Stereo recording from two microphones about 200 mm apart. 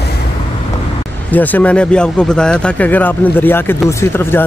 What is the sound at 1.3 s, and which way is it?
Speech, 10° left (ahead or behind).